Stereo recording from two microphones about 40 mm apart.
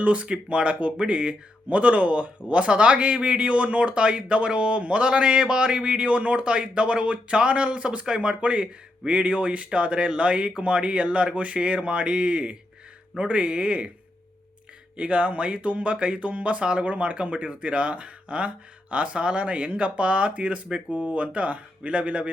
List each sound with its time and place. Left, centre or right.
0.0 s a man's voice: right
14.9 s speech: right